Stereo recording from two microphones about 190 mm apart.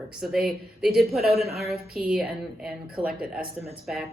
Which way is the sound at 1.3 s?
35° right (ahead or behind).